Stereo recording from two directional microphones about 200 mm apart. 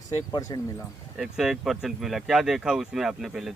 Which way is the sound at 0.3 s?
15° left (ahead or behind).